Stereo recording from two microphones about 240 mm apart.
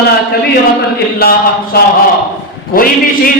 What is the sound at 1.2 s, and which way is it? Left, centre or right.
Speech, left.